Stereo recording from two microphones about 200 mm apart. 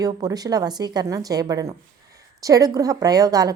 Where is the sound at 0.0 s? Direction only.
20° right (ahead or behind).